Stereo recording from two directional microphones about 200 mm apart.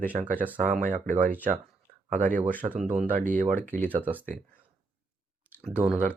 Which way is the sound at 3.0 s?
40° right (ahead or behind).